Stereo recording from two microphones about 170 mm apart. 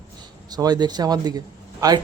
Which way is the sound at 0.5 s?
25° right (ahead or behind).